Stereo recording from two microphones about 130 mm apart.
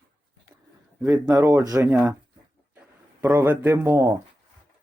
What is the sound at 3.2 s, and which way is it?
Speech, 15° right (ahead or behind).